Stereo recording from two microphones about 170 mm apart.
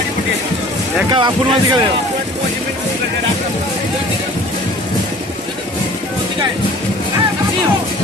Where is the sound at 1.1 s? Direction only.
25° right (ahead or behind).